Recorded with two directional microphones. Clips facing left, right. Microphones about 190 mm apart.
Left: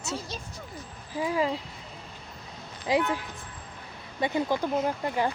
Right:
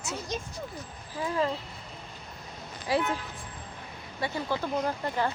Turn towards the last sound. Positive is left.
turn(degrees=10)  # may be behind; listen again after turning